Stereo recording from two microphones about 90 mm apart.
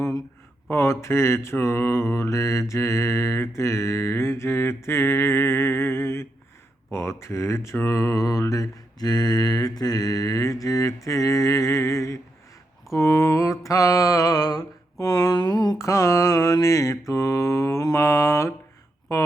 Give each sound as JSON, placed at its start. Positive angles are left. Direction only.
{"t": 0.7, "sound": "mantra", "side_deg": 30}